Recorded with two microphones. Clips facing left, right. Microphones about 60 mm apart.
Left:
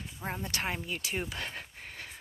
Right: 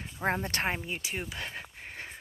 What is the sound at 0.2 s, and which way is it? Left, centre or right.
Speech, right.